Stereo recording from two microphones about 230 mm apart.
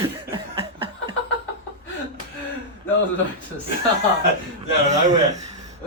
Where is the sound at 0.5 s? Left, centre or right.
Right.